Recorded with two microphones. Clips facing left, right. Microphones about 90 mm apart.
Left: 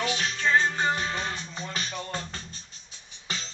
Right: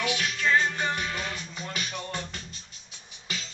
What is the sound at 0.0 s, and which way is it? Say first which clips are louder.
Music: even; 35° left (ahead or behind).